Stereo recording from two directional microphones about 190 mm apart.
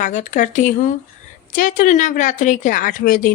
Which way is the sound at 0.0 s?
40° left (ahead or behind).